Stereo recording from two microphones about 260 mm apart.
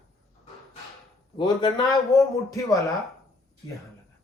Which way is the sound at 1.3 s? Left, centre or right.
Centre.